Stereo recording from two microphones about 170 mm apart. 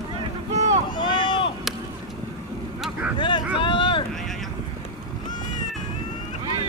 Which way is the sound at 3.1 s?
30° left (ahead or behind).